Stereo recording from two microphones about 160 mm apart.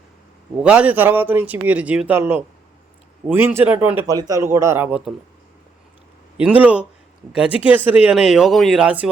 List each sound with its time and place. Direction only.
0.6 s a man's voice: 5° right (ahead or behind)
4.0 s a man's voice: 20° right (ahead or behind)
6.3 s a man's voice: 10° right (ahead or behind)